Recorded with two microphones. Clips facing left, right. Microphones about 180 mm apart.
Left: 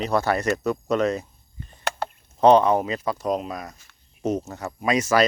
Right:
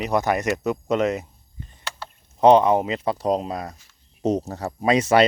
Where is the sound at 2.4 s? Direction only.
20° right (ahead or behind).